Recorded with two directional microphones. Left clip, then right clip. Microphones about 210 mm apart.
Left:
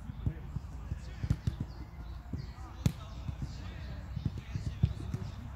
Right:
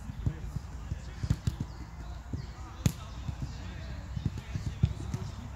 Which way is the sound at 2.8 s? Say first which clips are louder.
Right 3 dB; centre (ahead or behind).